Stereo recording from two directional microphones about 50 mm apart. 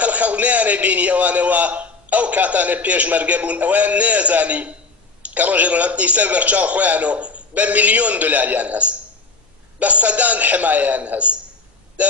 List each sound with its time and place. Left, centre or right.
0.0 s a man's voice: right